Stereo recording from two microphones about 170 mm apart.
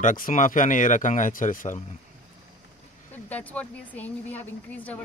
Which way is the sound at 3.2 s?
10° left (ahead or behind).